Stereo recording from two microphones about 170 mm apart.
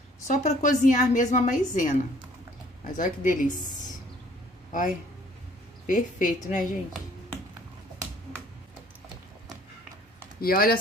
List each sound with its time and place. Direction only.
0.3 s a woman's voice: 45° left (ahead or behind)
5.9 s a woman's voice: 50° left (ahead or behind)
10.4 s speech: 60° left (ahead or behind)